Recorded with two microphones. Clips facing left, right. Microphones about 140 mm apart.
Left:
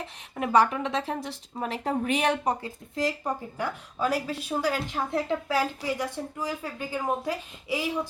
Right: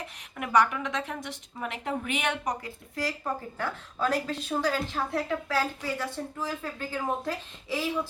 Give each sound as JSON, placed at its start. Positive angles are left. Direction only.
{"t": 0.0, "sound": "a woman's voice", "side_deg": 30}